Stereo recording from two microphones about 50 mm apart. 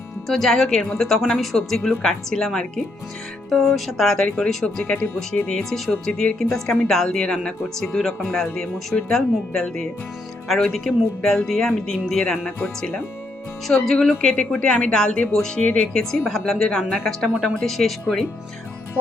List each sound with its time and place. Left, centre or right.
0.3 s a woman's voice: centre
14.2 s a woman's voice: centre
15.6 s speech: left
15.9 s a woman's voice: centre